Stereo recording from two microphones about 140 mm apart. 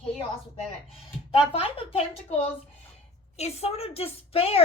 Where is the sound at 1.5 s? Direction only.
40° left (ahead or behind).